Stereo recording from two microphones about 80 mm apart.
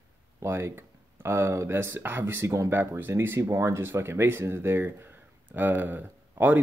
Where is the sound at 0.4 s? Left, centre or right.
Right.